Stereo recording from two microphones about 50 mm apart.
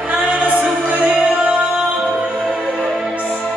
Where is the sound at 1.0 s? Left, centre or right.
Right.